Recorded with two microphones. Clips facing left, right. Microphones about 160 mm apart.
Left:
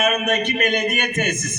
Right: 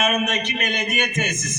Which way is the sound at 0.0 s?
55° left (ahead or behind).